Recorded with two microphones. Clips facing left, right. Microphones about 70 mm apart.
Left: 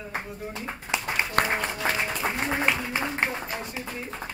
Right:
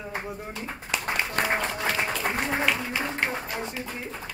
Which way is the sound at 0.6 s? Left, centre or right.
Left.